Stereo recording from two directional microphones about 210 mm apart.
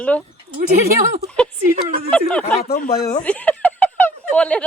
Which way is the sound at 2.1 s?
5° left (ahead or behind).